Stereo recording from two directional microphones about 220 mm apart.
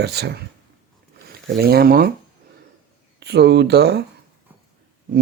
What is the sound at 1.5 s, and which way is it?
Speech, 45° right (ahead or behind).